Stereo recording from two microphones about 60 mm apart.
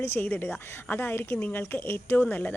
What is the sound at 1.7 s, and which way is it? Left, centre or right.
Speech, left.